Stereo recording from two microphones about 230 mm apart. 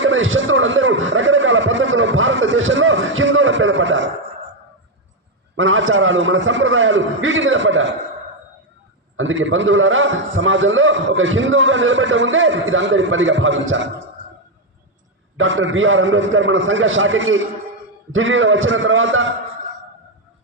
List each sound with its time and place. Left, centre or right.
0.0 s a sound: right
5.5 s a man's voice: right
9.1 s a man's voice: right
15.4 s a man's voice: right